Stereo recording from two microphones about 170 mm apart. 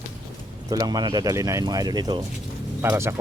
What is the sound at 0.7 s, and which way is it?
A man's voice, 20° right (ahead or behind).